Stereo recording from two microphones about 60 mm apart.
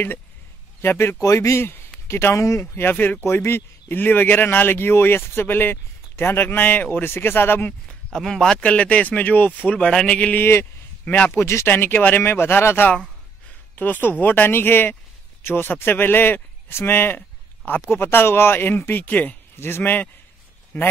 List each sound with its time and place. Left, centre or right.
0.8 s speech: left
1.2 s speech: left
1.6 s speech: left
2.0 s speech: left
2.6 s speech: left
7.9 s speech: centre
8.5 s speech: left
10.4 s speech: left
11.1 s speech: left
11.3 s speech: left
11.6 s speech: left
19.5 s speech: left
20.7 s speech: left